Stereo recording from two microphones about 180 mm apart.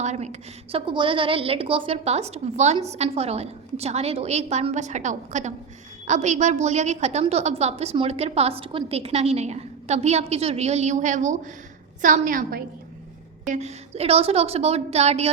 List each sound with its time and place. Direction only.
0.0 s a woman's voice: 40° right (ahead or behind)
13.5 s a woman's voice: 40° right (ahead or behind)